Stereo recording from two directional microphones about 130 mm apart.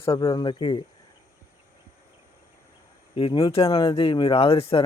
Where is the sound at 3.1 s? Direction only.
45° left (ahead or behind).